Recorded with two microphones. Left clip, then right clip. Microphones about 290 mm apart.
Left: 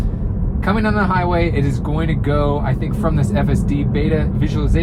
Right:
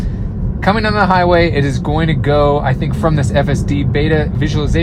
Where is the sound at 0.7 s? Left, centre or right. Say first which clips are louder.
Right 6 dB; right.